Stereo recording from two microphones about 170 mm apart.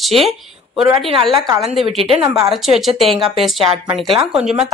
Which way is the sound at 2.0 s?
35° right (ahead or behind).